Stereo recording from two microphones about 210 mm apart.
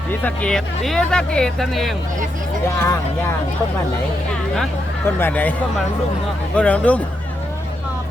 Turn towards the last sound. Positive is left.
turn(degrees=5)  # may be behind; listen again after turning